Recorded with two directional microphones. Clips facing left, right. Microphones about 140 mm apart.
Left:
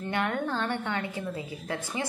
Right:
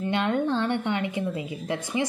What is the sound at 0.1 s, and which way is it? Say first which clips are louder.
A woman's voice: right 4 dB; 20° right (ahead or behind).